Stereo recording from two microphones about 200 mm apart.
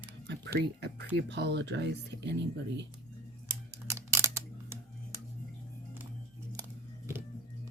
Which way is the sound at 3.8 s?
15° right (ahead or behind).